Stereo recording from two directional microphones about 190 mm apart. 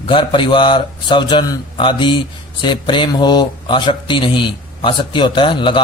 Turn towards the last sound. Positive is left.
turn(degrees=25)  # may be behind; listen again after turning